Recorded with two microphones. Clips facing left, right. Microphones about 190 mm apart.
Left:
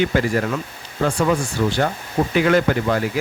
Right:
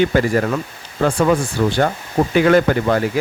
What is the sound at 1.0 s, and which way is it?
Speech, 55° right (ahead or behind).